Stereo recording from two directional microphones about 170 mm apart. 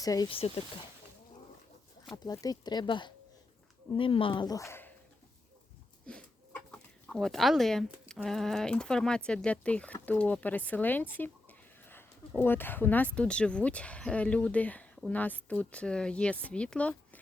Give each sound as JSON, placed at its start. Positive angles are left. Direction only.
{"t": 0.0, "sound": "speech", "side_deg": 20}
{"t": 0.3, "sound": "speech", "side_deg": 35}
{"t": 2.1, "sound": "speech", "side_deg": 20}
{"t": 6.1, "sound": "speech", "side_deg": 5}